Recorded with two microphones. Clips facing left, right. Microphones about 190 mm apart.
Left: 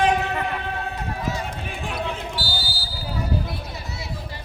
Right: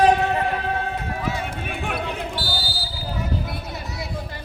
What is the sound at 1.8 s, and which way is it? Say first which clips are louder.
Basketball bounce: right 1 dB; 60° right (ahead or behind).